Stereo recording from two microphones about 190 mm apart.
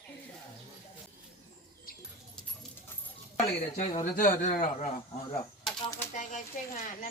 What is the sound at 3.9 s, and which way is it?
Speech, 45° left (ahead or behind).